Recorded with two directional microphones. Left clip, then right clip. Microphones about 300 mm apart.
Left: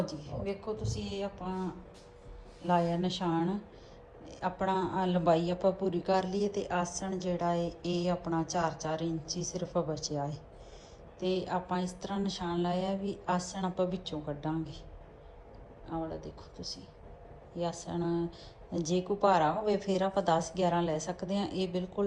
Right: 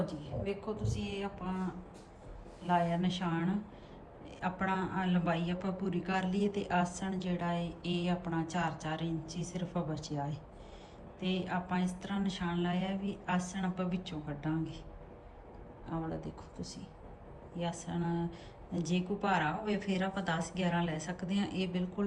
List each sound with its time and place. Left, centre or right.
0.0 s a man's voice: centre
2.6 s a man's voice: centre
11.2 s a man's voice: centre
15.9 s a man's voice: centre